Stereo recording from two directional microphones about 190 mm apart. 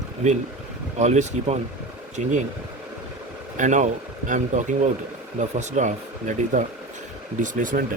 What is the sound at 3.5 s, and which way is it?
Speech, 40° right (ahead or behind).